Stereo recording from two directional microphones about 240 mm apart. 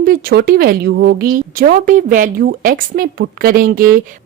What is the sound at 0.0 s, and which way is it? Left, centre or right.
A woman's voice, right.